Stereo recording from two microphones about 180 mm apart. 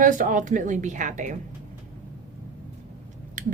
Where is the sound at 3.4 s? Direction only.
45° right (ahead or behind).